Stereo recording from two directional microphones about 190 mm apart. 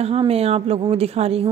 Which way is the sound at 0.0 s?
30° right (ahead or behind).